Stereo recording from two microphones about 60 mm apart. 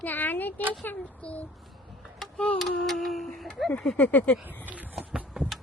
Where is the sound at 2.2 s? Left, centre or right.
Centre.